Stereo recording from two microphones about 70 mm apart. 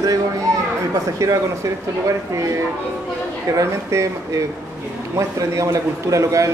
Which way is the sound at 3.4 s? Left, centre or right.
Right.